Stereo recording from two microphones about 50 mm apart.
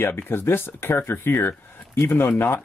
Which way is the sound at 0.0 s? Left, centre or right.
Left.